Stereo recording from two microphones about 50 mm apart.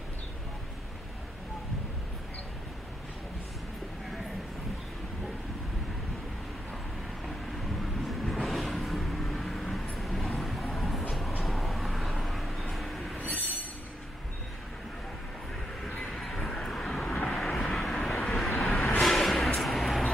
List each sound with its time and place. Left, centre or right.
7.8 s vehicle: centre
16.0 s vehicle: centre
18.7 s vehicle: centre
19.0 s a sound: centre